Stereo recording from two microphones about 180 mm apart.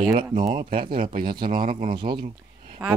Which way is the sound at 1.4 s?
50° right (ahead or behind).